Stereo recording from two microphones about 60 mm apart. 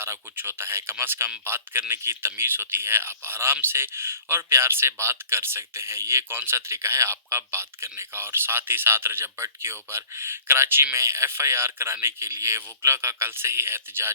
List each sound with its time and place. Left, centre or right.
0.0 s speech: right